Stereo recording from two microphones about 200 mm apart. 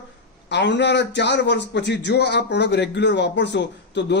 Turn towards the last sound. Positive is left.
turn(degrees=60)  # may be behind; listen again after turning